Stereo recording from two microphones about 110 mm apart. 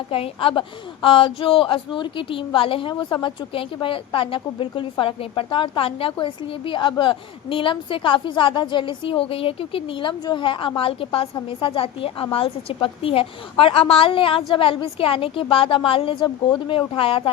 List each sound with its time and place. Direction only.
0.1 s a woman's voice: 55° left (ahead or behind)